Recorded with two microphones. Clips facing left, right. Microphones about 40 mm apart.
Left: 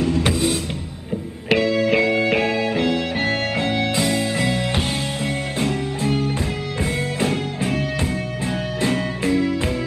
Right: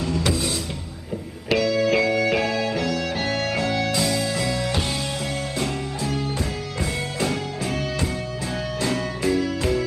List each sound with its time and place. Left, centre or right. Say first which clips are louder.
0.0 s music: left 4 dB; left